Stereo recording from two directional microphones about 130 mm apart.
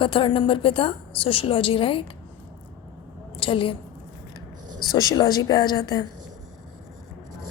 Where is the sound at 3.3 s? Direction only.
40° left (ahead or behind).